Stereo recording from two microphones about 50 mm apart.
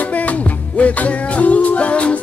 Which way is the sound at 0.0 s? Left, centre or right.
Left.